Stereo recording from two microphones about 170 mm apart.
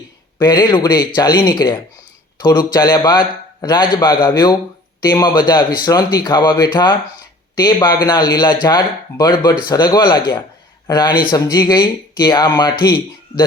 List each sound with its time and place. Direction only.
0.3 s a man's voice: 25° left (ahead or behind)